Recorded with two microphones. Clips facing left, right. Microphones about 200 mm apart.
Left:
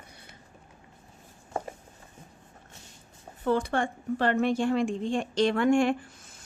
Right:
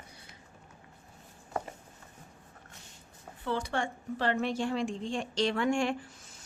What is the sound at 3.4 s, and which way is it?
A woman's voice, 50° left (ahead or behind).